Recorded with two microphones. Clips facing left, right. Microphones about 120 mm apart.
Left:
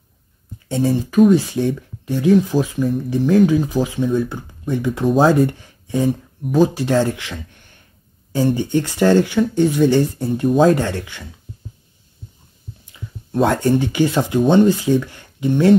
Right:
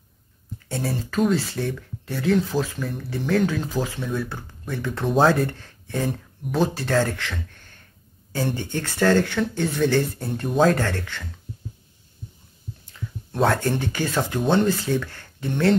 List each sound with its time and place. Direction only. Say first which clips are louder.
0.7 s speech: left 9 dB; 20° left (ahead or behind)
12.9 s speech: left 8 dB; 10° left (ahead or behind)